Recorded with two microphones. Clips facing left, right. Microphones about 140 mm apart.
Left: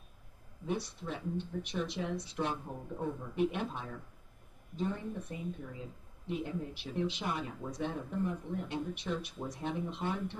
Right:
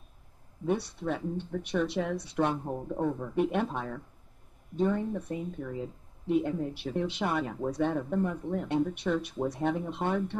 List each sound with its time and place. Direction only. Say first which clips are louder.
0.7 s speech: right 7 dB; 60° right (ahead or behind)